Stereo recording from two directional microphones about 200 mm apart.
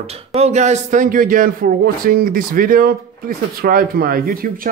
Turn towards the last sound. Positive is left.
turn(degrees=-45)  # may be behind; listen again after turning